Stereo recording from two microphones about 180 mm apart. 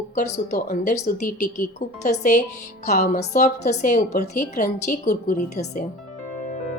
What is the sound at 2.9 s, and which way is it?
Speech, 65° left (ahead or behind).